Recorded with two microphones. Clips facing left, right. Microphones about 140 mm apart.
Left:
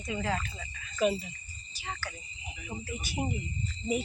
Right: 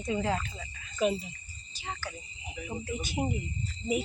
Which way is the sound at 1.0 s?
20° right (ahead or behind).